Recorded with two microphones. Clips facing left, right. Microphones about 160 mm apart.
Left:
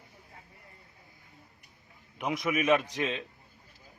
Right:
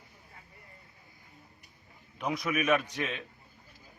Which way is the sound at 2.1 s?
20° left (ahead or behind).